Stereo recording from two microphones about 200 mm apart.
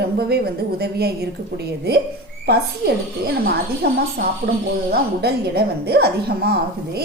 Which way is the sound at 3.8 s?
50° right (ahead or behind).